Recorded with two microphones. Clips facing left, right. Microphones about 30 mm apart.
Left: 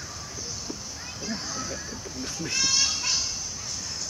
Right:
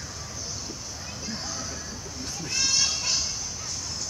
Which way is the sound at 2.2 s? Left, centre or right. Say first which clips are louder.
Left 1 dB; centre.